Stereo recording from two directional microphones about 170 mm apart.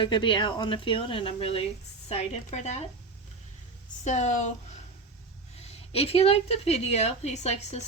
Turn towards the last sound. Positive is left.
turn(degrees=40)  # may be behind; listen again after turning